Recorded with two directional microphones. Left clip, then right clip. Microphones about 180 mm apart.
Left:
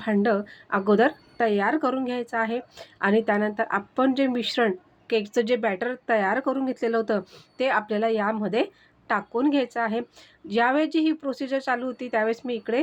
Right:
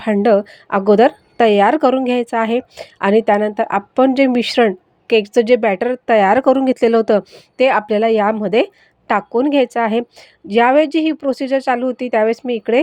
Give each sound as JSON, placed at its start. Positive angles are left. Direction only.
{"t": 0.0, "sound": "a woman's voice", "side_deg": -40}